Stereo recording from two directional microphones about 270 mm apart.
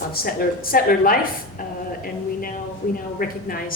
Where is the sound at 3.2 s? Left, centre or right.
Left.